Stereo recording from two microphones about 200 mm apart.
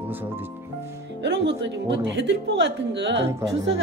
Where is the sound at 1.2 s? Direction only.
60° right (ahead or behind).